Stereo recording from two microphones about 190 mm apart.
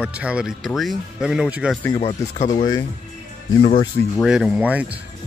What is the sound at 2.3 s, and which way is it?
Speech, 40° left (ahead or behind).